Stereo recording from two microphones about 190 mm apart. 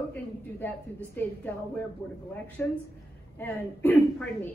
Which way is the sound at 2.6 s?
10° left (ahead or behind).